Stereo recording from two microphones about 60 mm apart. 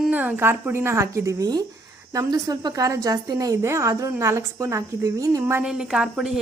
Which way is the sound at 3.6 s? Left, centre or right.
Right.